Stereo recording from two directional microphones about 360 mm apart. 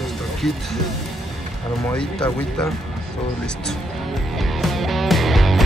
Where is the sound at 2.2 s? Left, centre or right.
Centre.